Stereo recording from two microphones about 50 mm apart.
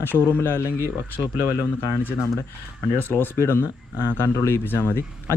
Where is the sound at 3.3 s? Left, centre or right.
Left.